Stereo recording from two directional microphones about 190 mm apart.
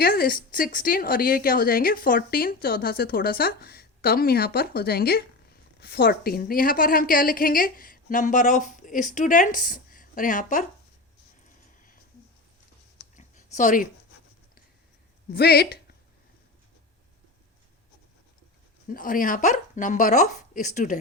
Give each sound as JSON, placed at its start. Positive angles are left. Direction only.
{"t": 0.0, "sound": "a woman's voice", "side_deg": 50}
{"t": 13.1, "sound": "a sound", "side_deg": 40}
{"t": 15.3, "sound": "speech", "side_deg": 55}
{"t": 18.9, "sound": "speech", "side_deg": 45}